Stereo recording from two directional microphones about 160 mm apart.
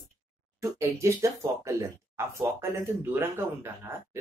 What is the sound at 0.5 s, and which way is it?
Speech, 20° right (ahead or behind).